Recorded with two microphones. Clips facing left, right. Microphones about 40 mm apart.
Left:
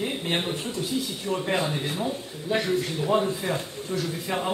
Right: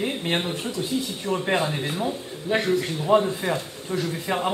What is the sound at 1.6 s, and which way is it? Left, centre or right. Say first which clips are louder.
Speech: right 2 dB; centre.